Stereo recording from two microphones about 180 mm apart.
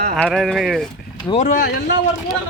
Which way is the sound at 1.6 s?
65° left (ahead or behind).